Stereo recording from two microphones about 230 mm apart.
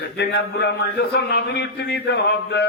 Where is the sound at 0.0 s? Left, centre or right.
Left.